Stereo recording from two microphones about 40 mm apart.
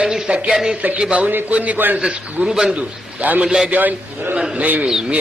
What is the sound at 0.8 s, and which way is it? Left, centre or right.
A man's voice, right.